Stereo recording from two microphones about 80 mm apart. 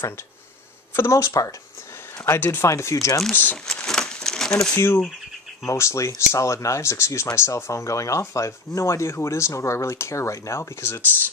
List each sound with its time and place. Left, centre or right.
0.9 s speech: left
2.2 s speech: left
2.7 s speech: left
3.6 s crumpling: centre
4.7 s speech: left
5.7 s speech: left